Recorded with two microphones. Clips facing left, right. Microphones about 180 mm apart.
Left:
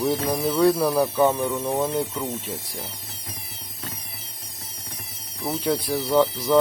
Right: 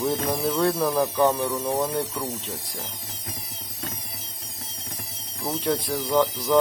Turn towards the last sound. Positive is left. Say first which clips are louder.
# left 2 dB
turn(degrees=5)  # may be behind; listen again after turning